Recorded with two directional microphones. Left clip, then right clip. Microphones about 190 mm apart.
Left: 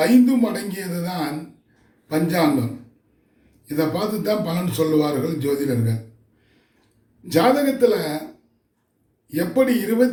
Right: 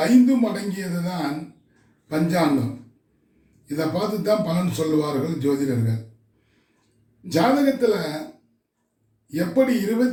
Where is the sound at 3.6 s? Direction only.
15° left (ahead or behind).